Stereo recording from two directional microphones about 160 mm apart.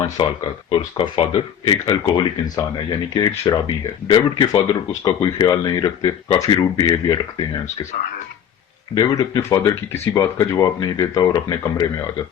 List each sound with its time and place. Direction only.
0.0 s speech: 30° left (ahead or behind)
1.8 s speech: 20° left (ahead or behind)
9.0 s speech: 25° left (ahead or behind)